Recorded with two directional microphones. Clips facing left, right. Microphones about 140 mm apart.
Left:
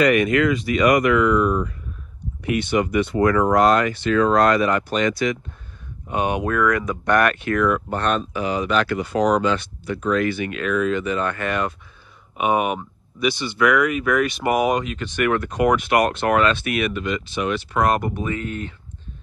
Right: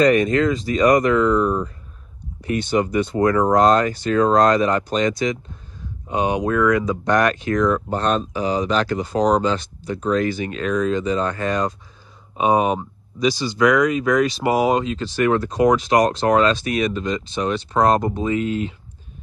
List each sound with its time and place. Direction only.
0.0 s speech: 25° right (ahead or behind)
4.6 s speech: 25° right (ahead or behind)
6.0 s speech: 20° right (ahead or behind)
7.5 s speech: 30° right (ahead or behind)
11.3 s speech: 20° right (ahead or behind)
12.4 s speech: 30° right (ahead or behind)
13.6 s speech: 15° right (ahead or behind); by 17.6 s 35° right (ahead or behind)
17.7 s speech: 25° right (ahead or behind)